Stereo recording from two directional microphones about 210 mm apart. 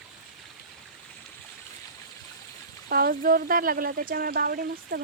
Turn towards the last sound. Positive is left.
turn(degrees=-45)  # may be behind; listen again after turning